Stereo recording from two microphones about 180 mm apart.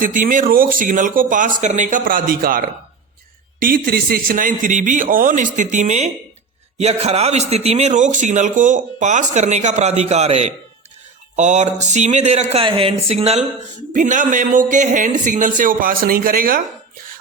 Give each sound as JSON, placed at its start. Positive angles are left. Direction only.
{"t": 0.0, "sound": "a man's voice", "side_deg": -50}
{"t": 13.9, "sound": "a man's voice", "side_deg": -45}